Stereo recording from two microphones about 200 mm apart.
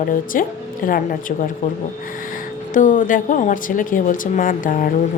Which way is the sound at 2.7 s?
40° left (ahead or behind).